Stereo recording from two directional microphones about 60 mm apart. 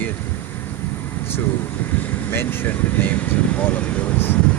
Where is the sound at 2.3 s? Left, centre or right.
Left.